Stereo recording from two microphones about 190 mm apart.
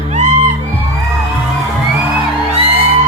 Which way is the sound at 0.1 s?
40° right (ahead or behind).